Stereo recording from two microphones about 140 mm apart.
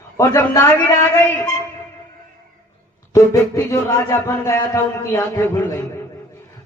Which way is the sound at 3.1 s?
20° left (ahead or behind).